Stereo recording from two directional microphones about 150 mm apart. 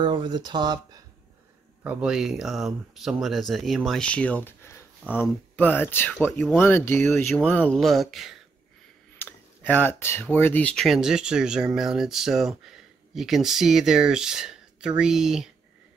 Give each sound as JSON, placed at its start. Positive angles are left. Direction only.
{"t": 0.0, "sound": "speech", "side_deg": -30}
{"t": 1.8, "sound": "speech", "side_deg": -10}
{"t": 7.1, "sound": "speech", "side_deg": 5}
{"t": 9.2, "sound": "speech", "side_deg": 10}